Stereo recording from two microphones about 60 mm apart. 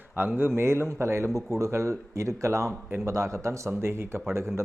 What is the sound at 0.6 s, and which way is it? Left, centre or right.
Speech, right.